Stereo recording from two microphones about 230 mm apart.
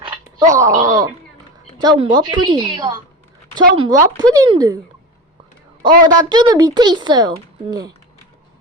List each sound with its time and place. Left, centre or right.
0.0 s roaring cats: centre
0.5 s a woman's voice: centre
6.1 s speech: centre